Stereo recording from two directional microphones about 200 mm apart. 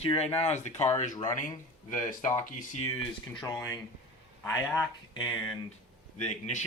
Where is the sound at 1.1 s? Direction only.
20° left (ahead or behind).